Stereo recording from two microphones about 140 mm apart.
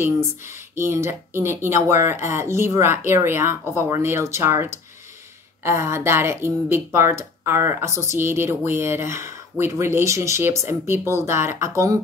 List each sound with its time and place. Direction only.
0.7 s speech: 20° right (ahead or behind)